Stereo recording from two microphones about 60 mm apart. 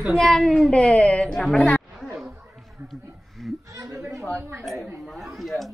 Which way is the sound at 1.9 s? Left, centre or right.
Centre.